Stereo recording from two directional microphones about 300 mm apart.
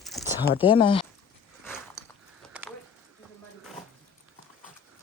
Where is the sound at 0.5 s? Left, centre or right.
Centre.